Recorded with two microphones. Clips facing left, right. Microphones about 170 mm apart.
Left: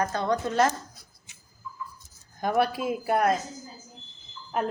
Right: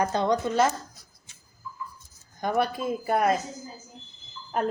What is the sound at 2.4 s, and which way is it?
Speech, 5° left (ahead or behind).